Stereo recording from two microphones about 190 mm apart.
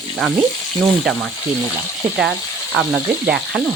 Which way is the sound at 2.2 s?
Centre (ahead or behind).